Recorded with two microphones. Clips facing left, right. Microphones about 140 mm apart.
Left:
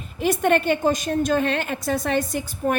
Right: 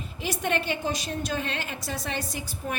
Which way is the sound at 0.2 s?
50° left (ahead or behind).